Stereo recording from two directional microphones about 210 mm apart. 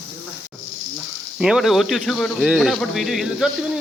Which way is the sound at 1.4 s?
5° right (ahead or behind).